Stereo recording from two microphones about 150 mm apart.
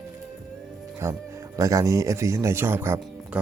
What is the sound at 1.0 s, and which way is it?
Speech, 20° right (ahead or behind).